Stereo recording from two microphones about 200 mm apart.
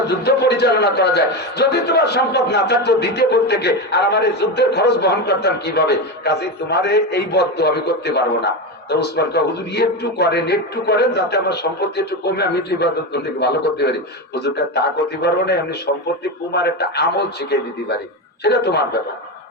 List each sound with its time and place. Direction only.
0.1 s speech: 55° left (ahead or behind)